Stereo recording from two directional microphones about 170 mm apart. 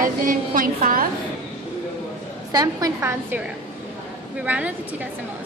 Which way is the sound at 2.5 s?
20° right (ahead or behind).